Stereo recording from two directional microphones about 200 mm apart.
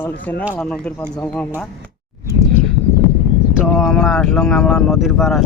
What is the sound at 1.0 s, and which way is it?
Speech, 15° left (ahead or behind).